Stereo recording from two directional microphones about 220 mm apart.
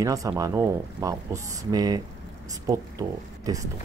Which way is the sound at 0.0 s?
15° right (ahead or behind).